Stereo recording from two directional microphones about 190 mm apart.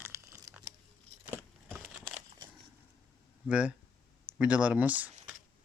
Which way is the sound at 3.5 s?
5° right (ahead or behind).